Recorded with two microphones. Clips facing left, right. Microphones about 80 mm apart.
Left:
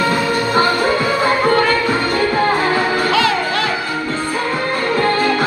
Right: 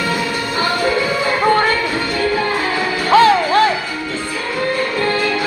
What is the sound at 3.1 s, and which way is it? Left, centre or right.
Music, right.